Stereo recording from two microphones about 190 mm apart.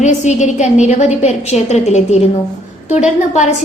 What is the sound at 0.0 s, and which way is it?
A woman's voice, 35° left (ahead or behind).